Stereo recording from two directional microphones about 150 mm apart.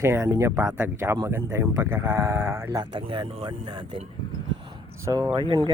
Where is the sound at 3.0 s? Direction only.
35° right (ahead or behind).